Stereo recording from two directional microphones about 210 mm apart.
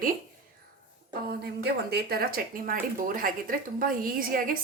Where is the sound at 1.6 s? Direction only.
50° right (ahead or behind).